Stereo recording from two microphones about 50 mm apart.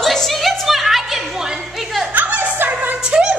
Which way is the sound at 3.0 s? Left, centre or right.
Centre.